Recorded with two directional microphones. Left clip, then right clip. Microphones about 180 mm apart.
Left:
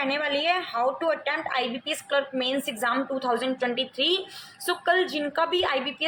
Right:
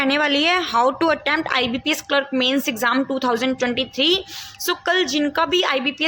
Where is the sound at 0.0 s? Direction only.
45° right (ahead or behind).